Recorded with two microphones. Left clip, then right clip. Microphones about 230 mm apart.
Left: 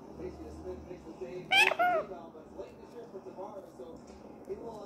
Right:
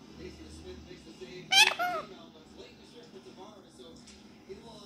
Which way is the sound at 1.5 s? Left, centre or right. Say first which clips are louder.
Right 1 dB; centre.